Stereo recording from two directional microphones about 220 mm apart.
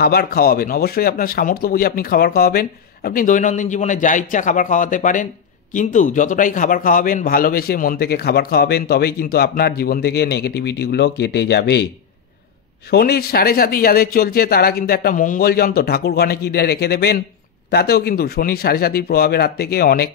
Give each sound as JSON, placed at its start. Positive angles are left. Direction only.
{"t": 0.0, "sound": "speech", "side_deg": 45}
{"t": 12.9, "sound": "speech", "side_deg": 45}